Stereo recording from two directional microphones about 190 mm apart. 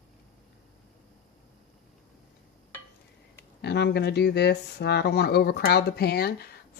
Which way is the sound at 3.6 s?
60° left (ahead or behind).